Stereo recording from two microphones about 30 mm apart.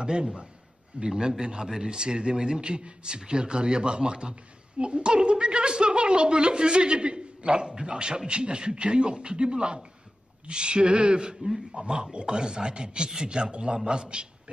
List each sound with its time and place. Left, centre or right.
0.0 s a man's voice: right